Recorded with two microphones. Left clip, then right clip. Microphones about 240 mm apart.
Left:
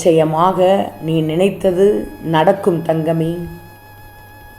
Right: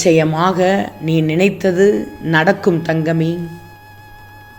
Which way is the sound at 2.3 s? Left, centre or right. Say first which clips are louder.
Left 1 dB; right.